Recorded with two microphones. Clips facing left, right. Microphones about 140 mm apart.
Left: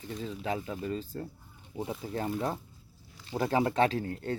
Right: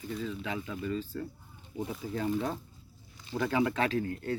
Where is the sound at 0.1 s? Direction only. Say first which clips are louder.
Left 2 dB; 35° left (ahead or behind).